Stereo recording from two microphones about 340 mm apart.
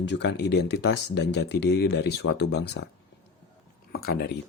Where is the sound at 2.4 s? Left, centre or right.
Left.